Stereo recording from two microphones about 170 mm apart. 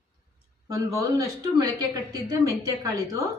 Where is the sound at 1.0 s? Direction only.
20° right (ahead or behind).